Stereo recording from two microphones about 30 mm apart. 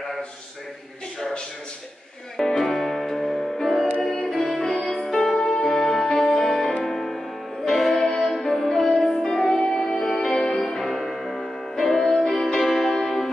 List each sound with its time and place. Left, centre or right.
2.3 s music: centre
8.2 s music: centre
10.9 s music: centre